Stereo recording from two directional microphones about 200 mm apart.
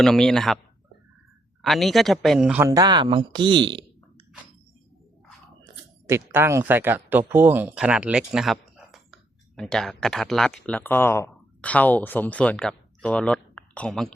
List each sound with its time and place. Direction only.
0.0 s speech: centre (ahead or behind)
1.6 s speech: centre (ahead or behind); by 3.8 s 25° right (ahead or behind)
6.1 s speech: 10° right (ahead or behind)